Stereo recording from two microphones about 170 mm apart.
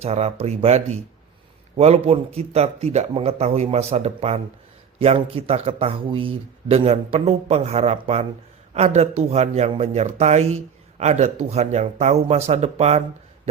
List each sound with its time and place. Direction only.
0.0 s a man's voice: 40° right (ahead or behind)